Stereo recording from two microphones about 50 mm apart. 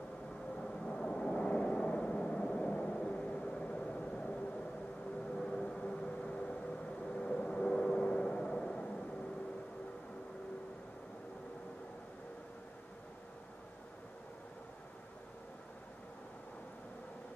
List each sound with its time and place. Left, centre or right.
0.6 s vehicle: centre